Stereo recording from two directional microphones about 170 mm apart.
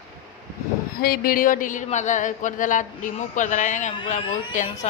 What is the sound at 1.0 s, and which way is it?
A woman's voice, 60° left (ahead or behind).